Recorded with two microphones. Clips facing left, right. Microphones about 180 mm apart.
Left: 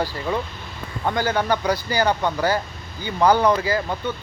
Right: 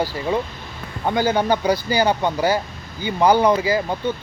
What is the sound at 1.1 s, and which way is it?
Speech, 15° right (ahead or behind).